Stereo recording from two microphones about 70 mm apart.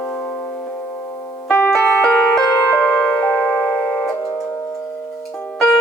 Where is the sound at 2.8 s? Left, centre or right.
Centre.